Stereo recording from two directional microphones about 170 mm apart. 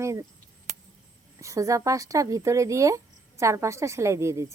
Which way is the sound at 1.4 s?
20° right (ahead or behind).